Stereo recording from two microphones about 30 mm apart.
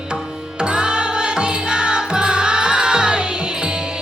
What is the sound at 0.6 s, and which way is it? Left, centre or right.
Music, right.